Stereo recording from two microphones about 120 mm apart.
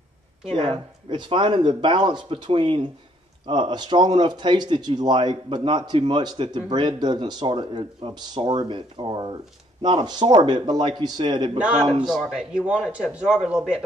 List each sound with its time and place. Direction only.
0.6 s speech: 40° right (ahead or behind)
12.1 s a man's voice: centre (ahead or behind)